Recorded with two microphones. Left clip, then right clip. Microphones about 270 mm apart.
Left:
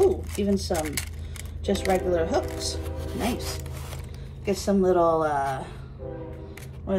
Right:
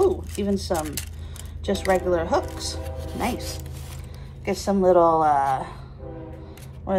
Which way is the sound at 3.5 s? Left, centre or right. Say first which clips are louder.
Left 1 dB; centre.